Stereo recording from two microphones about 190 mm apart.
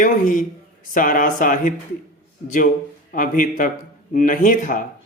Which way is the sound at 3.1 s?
45° left (ahead or behind).